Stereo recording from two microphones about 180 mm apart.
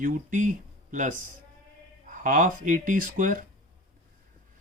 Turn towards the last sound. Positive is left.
turn(degrees=-50)  # may be behind; listen again after turning